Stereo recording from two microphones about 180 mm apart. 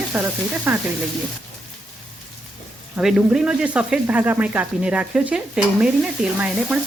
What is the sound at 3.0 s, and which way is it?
Speech, 5° right (ahead or behind).